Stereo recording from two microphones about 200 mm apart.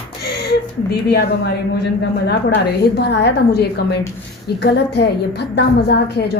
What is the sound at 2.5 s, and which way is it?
A woman's voice, 55° left (ahead or behind).